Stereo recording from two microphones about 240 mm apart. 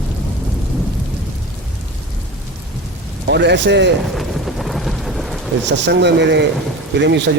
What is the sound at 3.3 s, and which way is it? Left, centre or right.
Speech, right.